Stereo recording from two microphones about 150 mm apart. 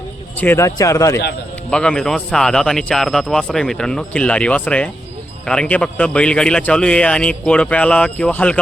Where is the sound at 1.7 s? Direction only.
5° left (ahead or behind).